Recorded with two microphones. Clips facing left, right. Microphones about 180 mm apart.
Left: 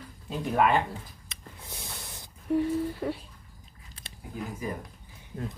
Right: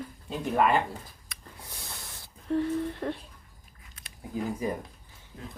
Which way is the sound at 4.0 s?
30° left (ahead or behind).